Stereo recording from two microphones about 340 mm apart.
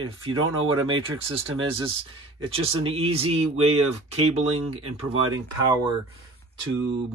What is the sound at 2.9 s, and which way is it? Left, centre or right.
Speech, centre.